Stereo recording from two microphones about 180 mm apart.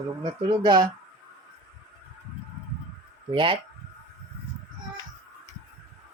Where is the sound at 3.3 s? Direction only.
25° right (ahead or behind).